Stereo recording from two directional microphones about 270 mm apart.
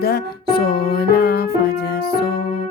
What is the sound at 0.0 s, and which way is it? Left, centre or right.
Music, left.